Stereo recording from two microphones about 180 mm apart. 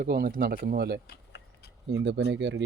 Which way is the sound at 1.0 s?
65° left (ahead or behind).